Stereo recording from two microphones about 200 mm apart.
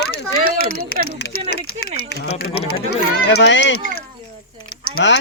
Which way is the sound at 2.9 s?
90° left.